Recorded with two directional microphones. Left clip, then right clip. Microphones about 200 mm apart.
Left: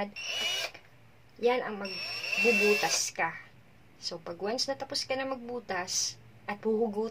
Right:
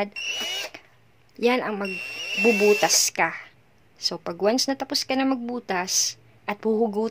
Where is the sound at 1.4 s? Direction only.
50° right (ahead or behind).